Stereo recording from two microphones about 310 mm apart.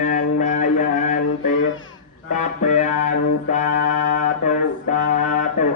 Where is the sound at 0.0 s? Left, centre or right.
Left.